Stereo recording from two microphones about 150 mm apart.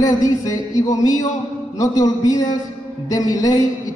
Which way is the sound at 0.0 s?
20° left (ahead or behind).